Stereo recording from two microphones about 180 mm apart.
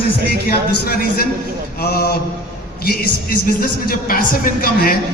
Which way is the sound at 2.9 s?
55° left (ahead or behind).